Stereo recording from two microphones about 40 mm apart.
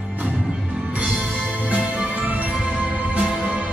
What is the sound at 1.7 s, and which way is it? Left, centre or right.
Music, right.